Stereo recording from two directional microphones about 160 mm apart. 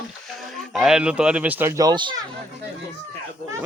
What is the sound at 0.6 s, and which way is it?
Speech, centre (ahead or behind).